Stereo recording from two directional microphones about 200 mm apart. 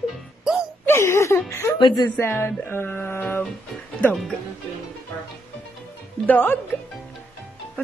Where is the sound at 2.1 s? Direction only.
10° left (ahead or behind).